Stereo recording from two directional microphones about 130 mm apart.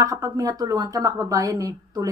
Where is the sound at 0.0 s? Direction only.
25° right (ahead or behind).